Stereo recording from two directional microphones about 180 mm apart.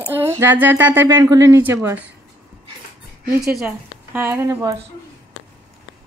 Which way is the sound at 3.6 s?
10° right (ahead or behind).